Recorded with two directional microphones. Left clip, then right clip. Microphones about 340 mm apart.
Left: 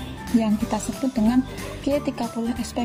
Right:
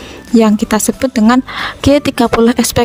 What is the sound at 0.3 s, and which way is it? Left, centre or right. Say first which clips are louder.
Speech: right 13 dB; right.